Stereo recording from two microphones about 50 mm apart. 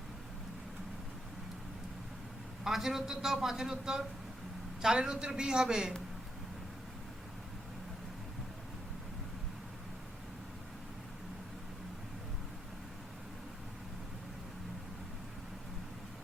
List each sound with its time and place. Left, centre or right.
2.6 s a man's voice: centre